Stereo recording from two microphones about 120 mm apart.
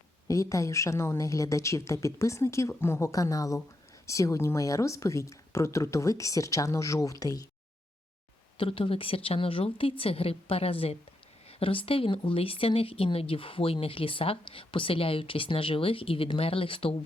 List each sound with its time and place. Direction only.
0.3 s speech: 25° left (ahead or behind)
8.5 s speech: 50° left (ahead or behind)